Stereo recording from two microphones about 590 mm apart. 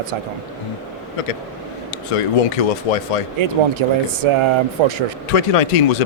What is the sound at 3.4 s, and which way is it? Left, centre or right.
Speech, right.